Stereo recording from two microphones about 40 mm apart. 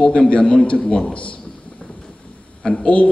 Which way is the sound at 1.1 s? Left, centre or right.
Left.